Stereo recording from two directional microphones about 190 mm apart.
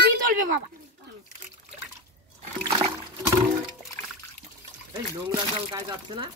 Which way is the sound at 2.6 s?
25° right (ahead or behind).